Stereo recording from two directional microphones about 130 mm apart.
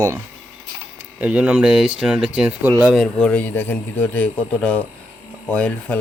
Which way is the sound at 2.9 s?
5° left (ahead or behind).